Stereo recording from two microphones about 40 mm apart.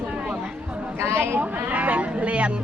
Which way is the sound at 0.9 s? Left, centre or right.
Right.